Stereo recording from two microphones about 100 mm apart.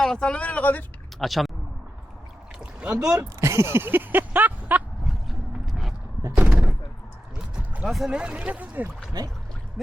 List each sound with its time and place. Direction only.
0.0 s speech: 5° left (ahead or behind)
1.2 s speech: centre (ahead or behind)
2.6 s boat: 10° right (ahead or behind)
3.2 s speech: 30° right (ahead or behind)
5.0 s a sound: centre (ahead or behind)
6.3 s speech: 15° right (ahead or behind)
7.9 s speech: centre (ahead or behind)
8.1 s speech: 10° right (ahead or behind)
9.8 s speech: centre (ahead or behind)